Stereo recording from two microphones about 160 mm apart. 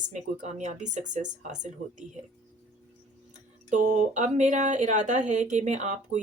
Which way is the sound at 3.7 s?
55° right (ahead or behind).